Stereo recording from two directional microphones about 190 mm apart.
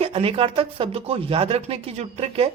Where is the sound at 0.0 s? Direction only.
30° right (ahead or behind).